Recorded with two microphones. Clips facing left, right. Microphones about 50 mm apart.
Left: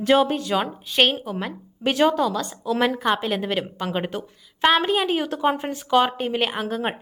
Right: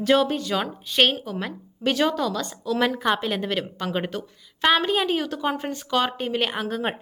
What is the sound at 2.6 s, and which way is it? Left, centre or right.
Speech, left.